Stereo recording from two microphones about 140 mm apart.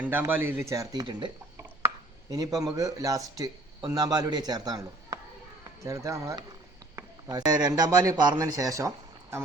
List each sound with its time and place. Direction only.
0.0 s a man's voice: 15° right (ahead or behind); by 1.3 s 30° right (ahead or behind)
2.3 s a man's voice: 25° right (ahead or behind)